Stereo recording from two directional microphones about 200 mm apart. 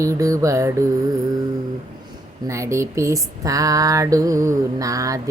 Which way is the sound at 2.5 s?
15° right (ahead or behind).